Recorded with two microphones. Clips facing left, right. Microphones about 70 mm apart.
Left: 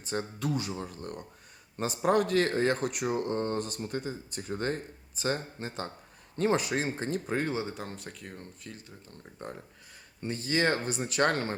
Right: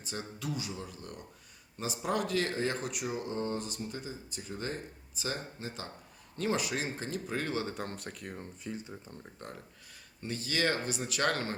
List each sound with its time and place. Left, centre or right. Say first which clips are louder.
0.0 s speech: left 6 dB; left
7.7 s speech: even; centre
8.6 s speech: right 5 dB; centre
9.4 s speech: left 8 dB; left